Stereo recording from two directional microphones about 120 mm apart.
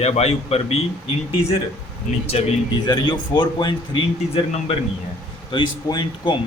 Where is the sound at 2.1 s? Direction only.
90° left.